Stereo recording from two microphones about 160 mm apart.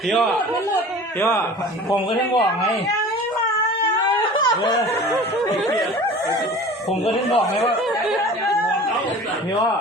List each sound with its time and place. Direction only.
0.1 s a man's voice: centre (ahead or behind)
1.2 s a man's voice: 15° left (ahead or behind)
4.4 s a sound: 30° left (ahead or behind)
7.0 s speech: 40° left (ahead or behind)